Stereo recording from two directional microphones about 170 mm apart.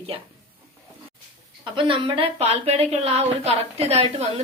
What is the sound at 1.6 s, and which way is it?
Speech, 30° right (ahead or behind).